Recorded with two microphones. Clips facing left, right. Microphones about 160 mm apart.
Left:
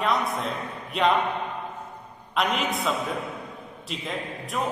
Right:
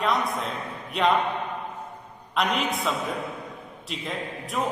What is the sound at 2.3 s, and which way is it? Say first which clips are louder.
A man's voice: even; centre (ahead or behind).